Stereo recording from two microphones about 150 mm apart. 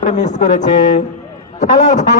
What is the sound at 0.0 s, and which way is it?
Speech, 55° left (ahead or behind).